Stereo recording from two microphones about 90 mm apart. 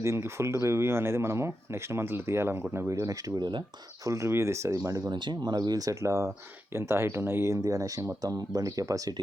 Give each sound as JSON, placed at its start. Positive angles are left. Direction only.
{"t": 0.0, "sound": "speech", "side_deg": -30}
{"t": 4.0, "sound": "speech", "side_deg": -35}
{"t": 5.1, "sound": "speech", "side_deg": -55}